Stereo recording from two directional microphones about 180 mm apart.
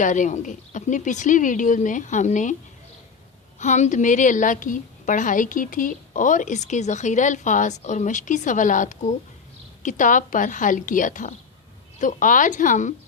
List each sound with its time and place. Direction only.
0.0 s a woman's voice: 45° left (ahead or behind)
3.6 s a woman's voice: 40° left (ahead or behind)